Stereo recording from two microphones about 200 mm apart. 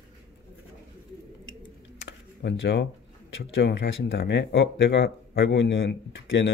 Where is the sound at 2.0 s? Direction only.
65° left (ahead or behind).